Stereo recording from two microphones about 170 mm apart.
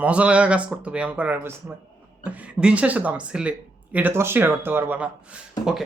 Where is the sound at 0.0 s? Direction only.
5° right (ahead or behind).